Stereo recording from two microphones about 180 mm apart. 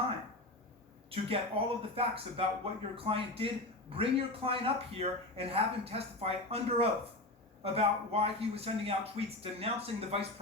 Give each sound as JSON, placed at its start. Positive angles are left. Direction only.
{"t": 1.1, "sound": "a man's voice", "side_deg": -30}